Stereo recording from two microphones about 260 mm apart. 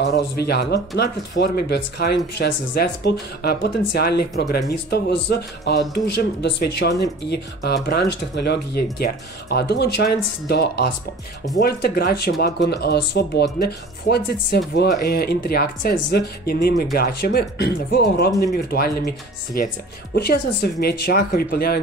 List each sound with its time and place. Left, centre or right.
0.0 s speech: left